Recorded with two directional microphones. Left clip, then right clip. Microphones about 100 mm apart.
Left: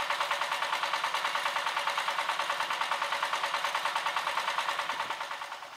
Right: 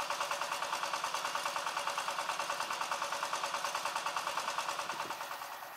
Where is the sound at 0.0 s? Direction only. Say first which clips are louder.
Left 6 dB; 20° left (ahead or behind).